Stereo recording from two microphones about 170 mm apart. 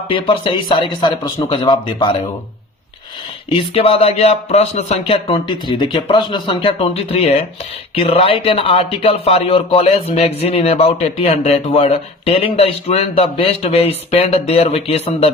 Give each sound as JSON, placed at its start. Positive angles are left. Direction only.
{"t": 0.1, "sound": "speech", "side_deg": 30}
{"t": 3.5, "sound": "speech", "side_deg": 35}